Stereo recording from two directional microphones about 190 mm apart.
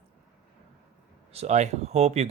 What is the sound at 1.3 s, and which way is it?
Speech, 35° right (ahead or behind).